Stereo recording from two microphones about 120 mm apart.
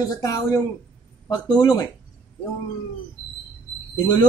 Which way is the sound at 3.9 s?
35° left (ahead or behind).